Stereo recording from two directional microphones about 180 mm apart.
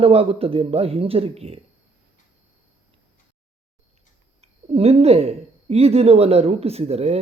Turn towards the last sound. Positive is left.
turn(degrees=-35)  # may be behind; listen again after turning